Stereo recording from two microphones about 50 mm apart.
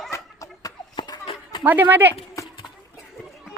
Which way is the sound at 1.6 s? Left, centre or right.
Right.